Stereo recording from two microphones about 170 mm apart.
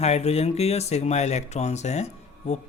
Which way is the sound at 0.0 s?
40° left (ahead or behind).